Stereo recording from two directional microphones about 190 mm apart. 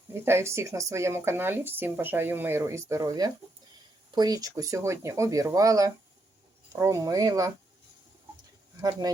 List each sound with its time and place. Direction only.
0.1 s speech: 15° right (ahead or behind)
8.8 s speech: 20° right (ahead or behind)